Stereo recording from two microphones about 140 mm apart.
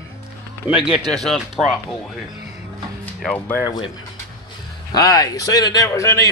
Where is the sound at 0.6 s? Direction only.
5° right (ahead or behind).